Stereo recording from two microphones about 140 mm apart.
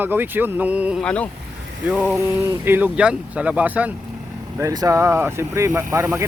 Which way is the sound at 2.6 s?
15° right (ahead or behind).